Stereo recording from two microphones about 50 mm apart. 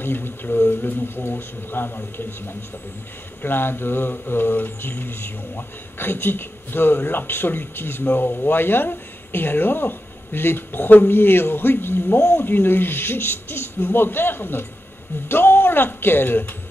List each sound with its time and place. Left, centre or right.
0.0 s speech: left